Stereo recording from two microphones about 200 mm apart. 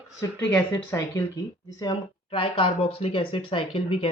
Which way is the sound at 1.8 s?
20° left (ahead or behind).